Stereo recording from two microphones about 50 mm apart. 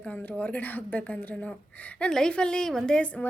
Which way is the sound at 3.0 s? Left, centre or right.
Left.